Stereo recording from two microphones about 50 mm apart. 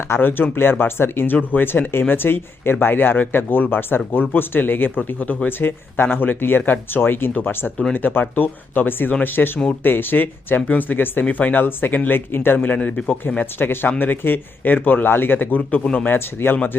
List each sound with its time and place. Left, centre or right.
0.1 s speech: left
5.5 s speech: left
12.6 s speech: left
13.4 s speech: left
16.0 s speech: left